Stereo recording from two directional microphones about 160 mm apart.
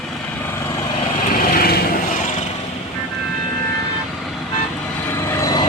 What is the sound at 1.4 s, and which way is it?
Vehicle, 70° left (ahead or behind).